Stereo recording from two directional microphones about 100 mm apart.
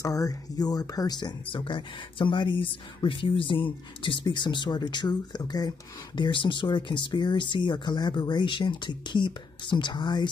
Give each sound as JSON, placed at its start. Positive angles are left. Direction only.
{"t": 0.0, "sound": "speech", "side_deg": 35}
{"t": 1.4, "sound": "speech", "side_deg": 60}